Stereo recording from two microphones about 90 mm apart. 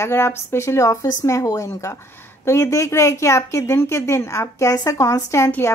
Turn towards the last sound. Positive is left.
turn(degrees=35)  # may be behind; listen again after turning